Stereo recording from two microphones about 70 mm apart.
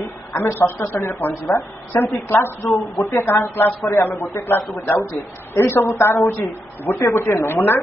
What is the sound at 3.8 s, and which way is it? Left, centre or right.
Speech, left.